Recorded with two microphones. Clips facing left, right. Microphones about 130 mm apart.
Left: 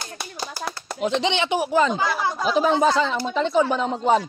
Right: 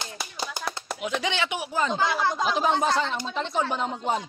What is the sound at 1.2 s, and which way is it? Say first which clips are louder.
Speech: left 6 dB; 25° left (ahead or behind).